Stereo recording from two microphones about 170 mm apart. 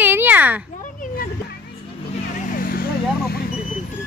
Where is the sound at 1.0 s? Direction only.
55° left (ahead or behind).